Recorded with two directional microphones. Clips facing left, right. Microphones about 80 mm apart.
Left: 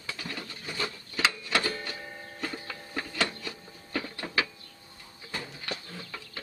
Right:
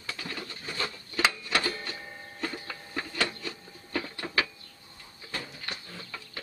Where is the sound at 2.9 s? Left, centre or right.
Centre.